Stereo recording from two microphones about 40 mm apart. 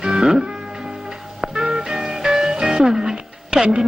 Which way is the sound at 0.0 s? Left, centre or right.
Centre.